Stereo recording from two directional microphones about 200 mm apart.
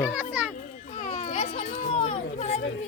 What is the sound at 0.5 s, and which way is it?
Children playing, 40° left (ahead or behind).